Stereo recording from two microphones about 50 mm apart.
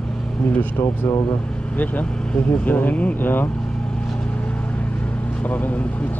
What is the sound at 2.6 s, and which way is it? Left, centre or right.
Speech, left.